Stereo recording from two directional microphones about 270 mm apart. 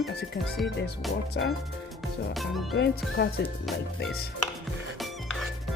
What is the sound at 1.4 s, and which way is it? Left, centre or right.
Speech, left.